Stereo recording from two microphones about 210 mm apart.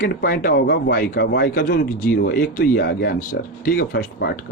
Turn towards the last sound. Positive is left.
turn(degrees=50)  # may be behind; listen again after turning